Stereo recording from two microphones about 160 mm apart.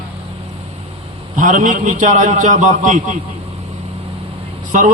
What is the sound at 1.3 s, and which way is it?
A man's voice, 55° right (ahead or behind).